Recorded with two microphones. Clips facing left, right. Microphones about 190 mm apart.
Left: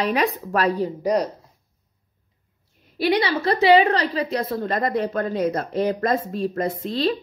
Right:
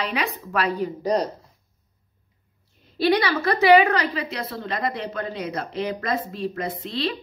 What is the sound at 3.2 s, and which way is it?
A woman's voice, 25° left (ahead or behind).